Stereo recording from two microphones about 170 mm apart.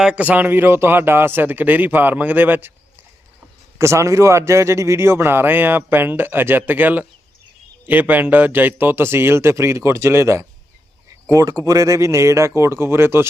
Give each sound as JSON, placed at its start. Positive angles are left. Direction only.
{"t": 0.0, "sound": "a man's voice", "side_deg": -5}
{"t": 3.8, "sound": "a man's voice", "side_deg": -15}